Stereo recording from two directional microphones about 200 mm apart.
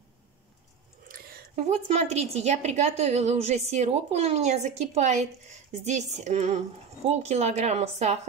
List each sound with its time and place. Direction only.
1.0 s a woman's voice: 40° right (ahead or behind)